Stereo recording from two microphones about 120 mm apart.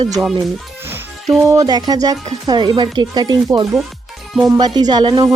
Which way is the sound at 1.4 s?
30° right (ahead or behind).